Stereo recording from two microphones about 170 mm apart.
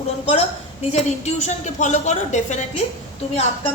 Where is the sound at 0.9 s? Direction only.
40° left (ahead or behind).